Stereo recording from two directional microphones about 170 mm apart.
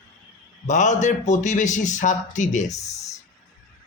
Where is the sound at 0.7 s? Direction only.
45° left (ahead or behind).